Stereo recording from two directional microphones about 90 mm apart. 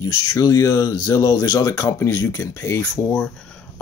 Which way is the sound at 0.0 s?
40° left (ahead or behind).